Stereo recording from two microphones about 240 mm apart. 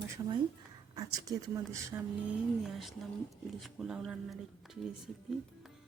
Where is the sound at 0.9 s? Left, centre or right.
Centre.